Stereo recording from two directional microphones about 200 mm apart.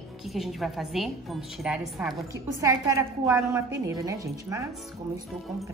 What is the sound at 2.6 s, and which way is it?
A woman's voice, 15° right (ahead or behind).